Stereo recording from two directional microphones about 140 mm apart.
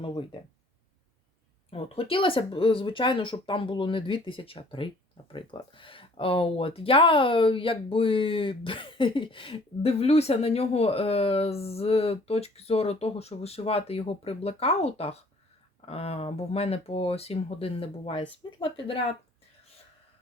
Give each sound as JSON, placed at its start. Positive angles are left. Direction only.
{"t": 1.7, "sound": "speech", "side_deg": 45}